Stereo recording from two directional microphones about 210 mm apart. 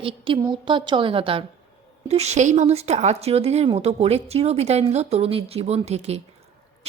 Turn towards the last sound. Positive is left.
turn(degrees=-30)  # may be behind; listen again after turning